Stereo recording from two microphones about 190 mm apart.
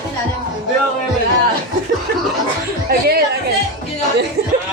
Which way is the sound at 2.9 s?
55° right (ahead or behind).